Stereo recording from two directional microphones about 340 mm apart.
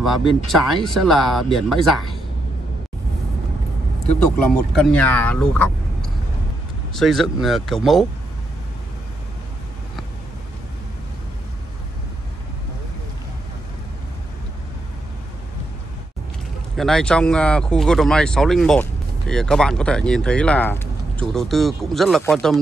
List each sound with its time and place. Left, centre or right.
0.5 s speech: centre
4.0 s speech: centre
4.7 s speech: centre
16.7 s speech: centre